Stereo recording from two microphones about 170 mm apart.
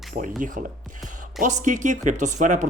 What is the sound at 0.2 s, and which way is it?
A man's voice, 50° right (ahead or behind).